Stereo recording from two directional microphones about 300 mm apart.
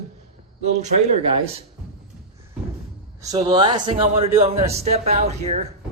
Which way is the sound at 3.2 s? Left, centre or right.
Centre.